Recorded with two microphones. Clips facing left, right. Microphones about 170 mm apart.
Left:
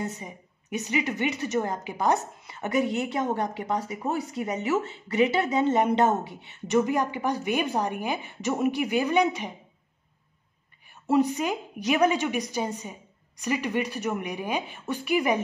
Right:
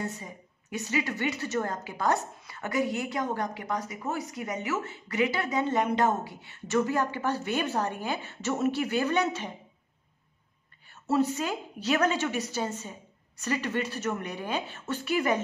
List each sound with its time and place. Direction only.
0.0 s a woman's voice: 20° left (ahead or behind)
10.9 s a woman's voice: 15° left (ahead or behind)